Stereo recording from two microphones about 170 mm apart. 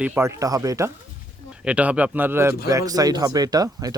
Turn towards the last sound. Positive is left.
turn(degrees=-20)  # may be behind; listen again after turning